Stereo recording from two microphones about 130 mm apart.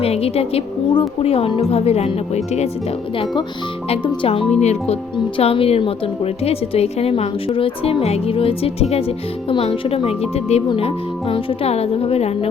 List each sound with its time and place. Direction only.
0.0 s a woman's voice: 50° left (ahead or behind)
3.8 s a woman's voice: 45° left (ahead or behind)
4.6 s a woman's voice: 55° left (ahead or behind)